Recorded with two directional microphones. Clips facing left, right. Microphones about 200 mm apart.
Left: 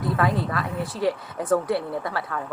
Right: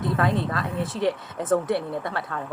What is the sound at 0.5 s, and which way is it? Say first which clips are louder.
Speech: even; 25° right (ahead or behind).